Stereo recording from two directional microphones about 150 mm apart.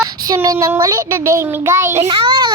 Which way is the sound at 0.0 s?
25° right (ahead or behind).